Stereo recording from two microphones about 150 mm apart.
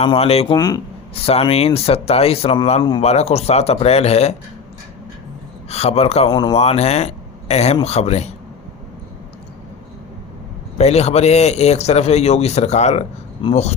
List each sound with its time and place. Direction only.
0.0 s a man's voice: 40° left (ahead or behind)
0.5 s speech: 25° left (ahead or behind)
1.1 s a man's voice: 40° left (ahead or behind)
5.6 s a man's voice: 45° left (ahead or behind)
6.3 s speech: 30° left (ahead or behind)
6.6 s a man's voice: 45° left (ahead or behind)
10.8 s a man's voice: 45° left (ahead or behind)